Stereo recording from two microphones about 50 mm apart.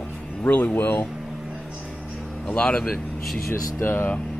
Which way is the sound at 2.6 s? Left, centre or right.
Left.